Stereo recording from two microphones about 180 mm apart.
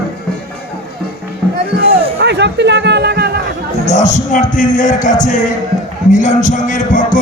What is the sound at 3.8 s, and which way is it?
Music, 40° left (ahead or behind).